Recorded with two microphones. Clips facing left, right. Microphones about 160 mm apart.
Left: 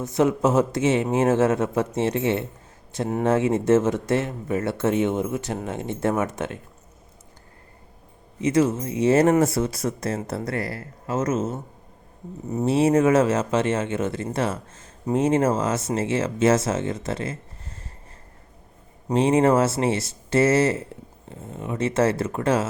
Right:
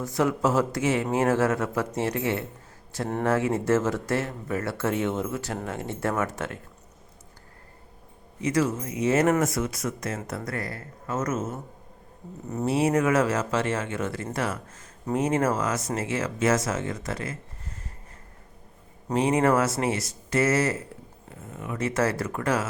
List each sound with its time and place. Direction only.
0.0 s speech: 20° left (ahead or behind)
8.4 s speech: 25° left (ahead or behind)
12.6 s speech: 25° left (ahead or behind)
19.1 s speech: 25° left (ahead or behind)